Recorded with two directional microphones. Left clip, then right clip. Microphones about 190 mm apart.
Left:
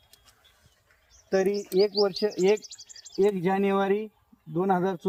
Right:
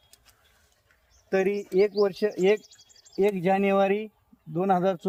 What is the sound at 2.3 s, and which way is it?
Speech, 35° right (ahead or behind).